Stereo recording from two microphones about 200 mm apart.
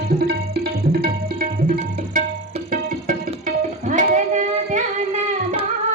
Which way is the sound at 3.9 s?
40° right (ahead or behind).